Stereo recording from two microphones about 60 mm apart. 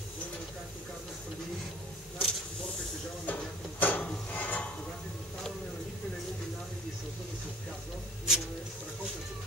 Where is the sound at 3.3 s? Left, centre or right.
Left.